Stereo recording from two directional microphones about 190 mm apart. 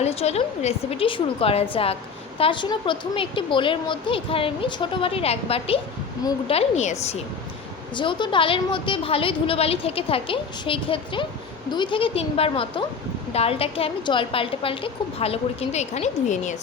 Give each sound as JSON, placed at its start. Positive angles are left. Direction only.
{"t": 0.0, "sound": "a woman's voice", "side_deg": 35}